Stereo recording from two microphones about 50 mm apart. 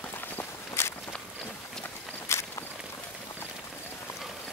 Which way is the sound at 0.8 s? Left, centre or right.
Left.